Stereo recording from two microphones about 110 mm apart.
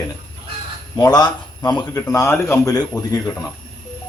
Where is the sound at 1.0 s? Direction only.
35° left (ahead or behind).